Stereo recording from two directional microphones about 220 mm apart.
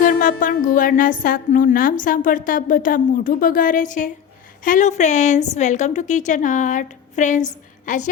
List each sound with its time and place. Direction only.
0.0 s music: 35° left (ahead or behind)